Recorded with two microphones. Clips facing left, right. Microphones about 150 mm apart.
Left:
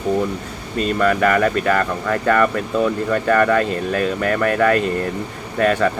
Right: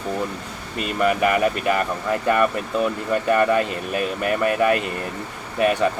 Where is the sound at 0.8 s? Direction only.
15° right (ahead or behind).